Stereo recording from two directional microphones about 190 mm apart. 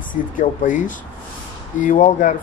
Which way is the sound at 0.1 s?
45° left (ahead or behind).